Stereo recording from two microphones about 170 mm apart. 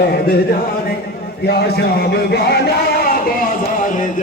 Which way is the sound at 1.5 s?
70° left (ahead or behind).